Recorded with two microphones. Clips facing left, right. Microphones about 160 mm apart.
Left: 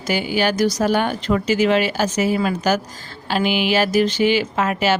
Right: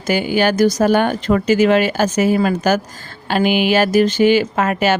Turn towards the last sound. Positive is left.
turn(degrees=-50)  # may be behind; listen again after turning